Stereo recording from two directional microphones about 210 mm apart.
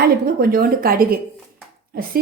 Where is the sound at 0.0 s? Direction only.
45° right (ahead or behind).